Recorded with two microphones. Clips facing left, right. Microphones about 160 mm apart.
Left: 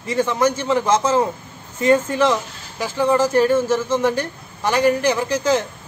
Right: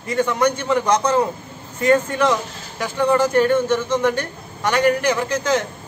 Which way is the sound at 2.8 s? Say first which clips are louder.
Even; 5° left (ahead or behind).